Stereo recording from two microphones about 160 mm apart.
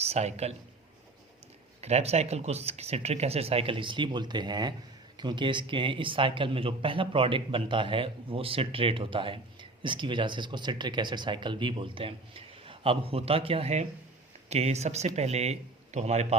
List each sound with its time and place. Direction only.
0.0 s speech: 40° right (ahead or behind)
1.8 s speech: 40° right (ahead or behind)